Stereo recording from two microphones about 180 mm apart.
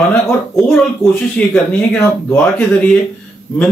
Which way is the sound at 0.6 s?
Centre (ahead or behind).